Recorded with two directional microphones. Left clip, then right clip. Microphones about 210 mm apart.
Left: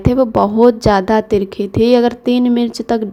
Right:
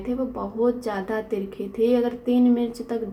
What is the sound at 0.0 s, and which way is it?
A woman's voice, 45° left (ahead or behind).